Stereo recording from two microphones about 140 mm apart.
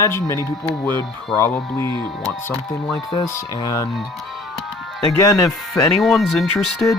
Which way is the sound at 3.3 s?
20° left (ahead or behind).